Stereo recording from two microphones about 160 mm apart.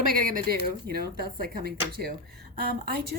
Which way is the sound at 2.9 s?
90° right.